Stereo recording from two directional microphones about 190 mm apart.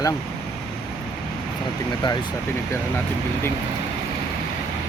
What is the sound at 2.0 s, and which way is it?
Speech, 25° left (ahead or behind).